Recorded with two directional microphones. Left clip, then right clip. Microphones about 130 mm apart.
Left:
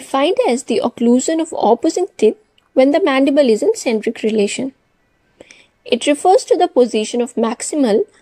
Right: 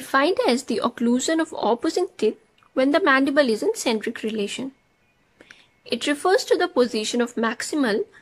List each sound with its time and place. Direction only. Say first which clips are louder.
0.1 s speech: left 5 dB; 15° left (ahead or behind)